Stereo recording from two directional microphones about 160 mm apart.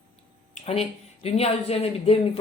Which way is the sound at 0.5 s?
40° left (ahead or behind).